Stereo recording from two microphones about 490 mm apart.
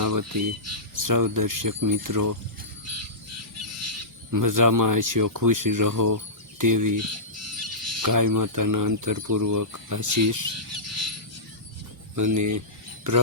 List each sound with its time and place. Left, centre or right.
0.0 s speech: right
3.8 s speech: right
10.8 s a sound: right
12.1 s speech: right